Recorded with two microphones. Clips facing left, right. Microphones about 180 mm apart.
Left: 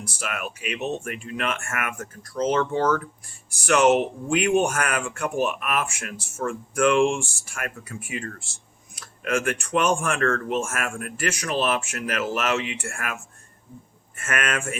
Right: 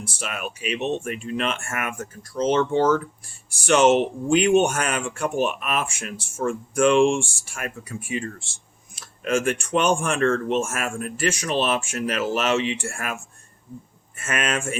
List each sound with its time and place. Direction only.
0.0 s speech: 25° right (ahead or behind)
14.2 s speech: 25° right (ahead or behind)